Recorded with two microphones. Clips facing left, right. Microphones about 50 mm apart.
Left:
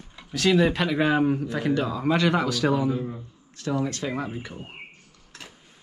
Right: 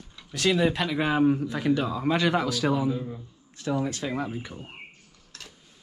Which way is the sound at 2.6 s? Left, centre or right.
Centre.